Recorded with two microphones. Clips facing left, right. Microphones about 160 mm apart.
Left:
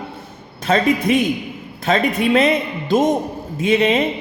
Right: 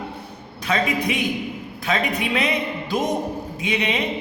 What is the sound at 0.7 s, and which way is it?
Speech, 45° left (ahead or behind).